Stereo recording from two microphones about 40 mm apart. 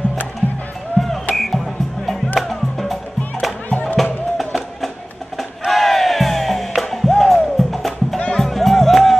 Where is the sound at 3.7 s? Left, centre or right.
Left.